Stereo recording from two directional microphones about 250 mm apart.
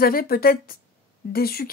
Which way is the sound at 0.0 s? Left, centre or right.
Left.